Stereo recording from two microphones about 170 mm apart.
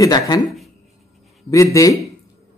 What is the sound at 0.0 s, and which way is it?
Speech, 25° left (ahead or behind).